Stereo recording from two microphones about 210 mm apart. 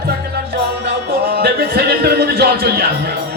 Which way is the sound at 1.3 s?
50° right (ahead or behind).